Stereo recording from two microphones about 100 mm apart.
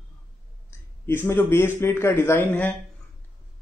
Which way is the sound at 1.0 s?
25° left (ahead or behind).